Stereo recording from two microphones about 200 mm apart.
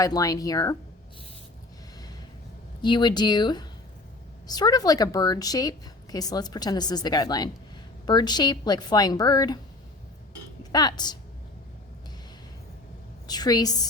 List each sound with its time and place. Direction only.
0.0 s speech: 15° left (ahead or behind)
2.8 s a woman's voice: 20° left (ahead or behind)
10.6 s a woman's voice: 20° left (ahead or behind)
13.2 s a woman's voice: 20° left (ahead or behind)